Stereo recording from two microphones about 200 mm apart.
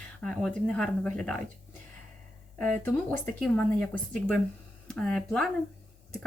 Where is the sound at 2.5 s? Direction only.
5° left (ahead or behind).